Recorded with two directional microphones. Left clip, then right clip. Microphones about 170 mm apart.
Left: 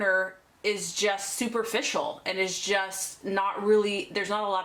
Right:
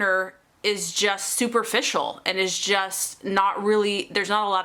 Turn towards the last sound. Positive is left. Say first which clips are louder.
# right 5 dB
turn(degrees=-30)  # may be behind; listen again after turning